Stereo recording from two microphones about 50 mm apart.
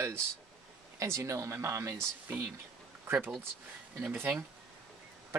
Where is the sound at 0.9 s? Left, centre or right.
Right.